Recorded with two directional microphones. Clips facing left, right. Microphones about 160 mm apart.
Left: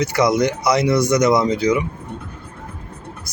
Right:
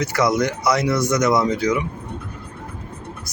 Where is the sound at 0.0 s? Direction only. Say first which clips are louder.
Left 2 dB; 15° left (ahead or behind).